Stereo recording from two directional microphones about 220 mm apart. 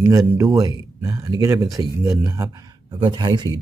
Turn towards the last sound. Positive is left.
turn(degrees=-20)  # may be behind; listen again after turning